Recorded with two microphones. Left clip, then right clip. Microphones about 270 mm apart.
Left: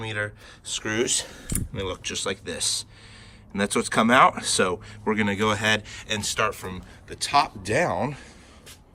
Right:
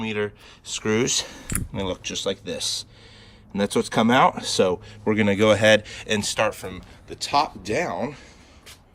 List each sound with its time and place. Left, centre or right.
0.0 s speech: centre
1.5 s speech: centre